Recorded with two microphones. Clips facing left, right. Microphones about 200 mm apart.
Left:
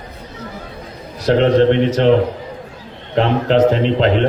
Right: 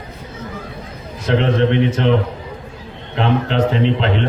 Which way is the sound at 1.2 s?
35° left (ahead or behind).